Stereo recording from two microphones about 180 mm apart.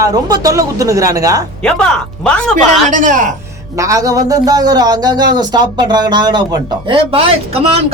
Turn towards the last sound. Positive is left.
turn(degrees=-30)  # may be behind; listen again after turning